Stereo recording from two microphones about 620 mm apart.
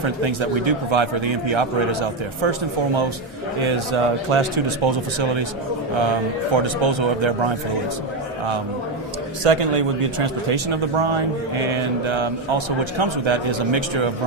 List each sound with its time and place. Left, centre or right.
0.2 s a man's voice: right
9.4 s a man's voice: right